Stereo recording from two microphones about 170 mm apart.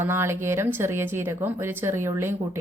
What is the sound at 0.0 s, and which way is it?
Speech, 15° right (ahead or behind).